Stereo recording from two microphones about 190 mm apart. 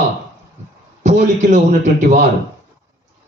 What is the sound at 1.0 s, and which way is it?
A man's voice, 40° right (ahead or behind).